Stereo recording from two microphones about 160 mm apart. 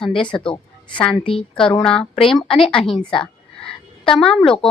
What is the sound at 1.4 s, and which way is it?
Speech, 5° left (ahead or behind).